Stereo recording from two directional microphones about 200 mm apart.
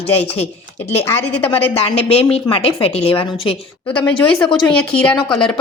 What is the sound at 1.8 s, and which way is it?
A woman's voice, 30° left (ahead or behind).